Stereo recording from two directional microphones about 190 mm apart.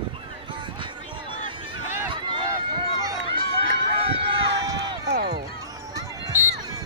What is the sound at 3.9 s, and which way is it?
Run, 30° right (ahead or behind).